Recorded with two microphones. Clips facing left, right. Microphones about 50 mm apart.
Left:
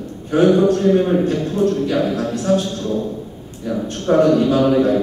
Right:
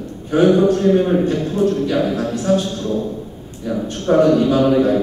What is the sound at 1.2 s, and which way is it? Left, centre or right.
Speech, centre.